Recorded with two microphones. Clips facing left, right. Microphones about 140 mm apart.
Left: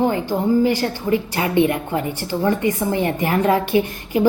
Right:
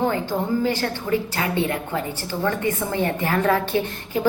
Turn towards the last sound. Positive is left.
turn(degrees=15)  # may be behind; listen again after turning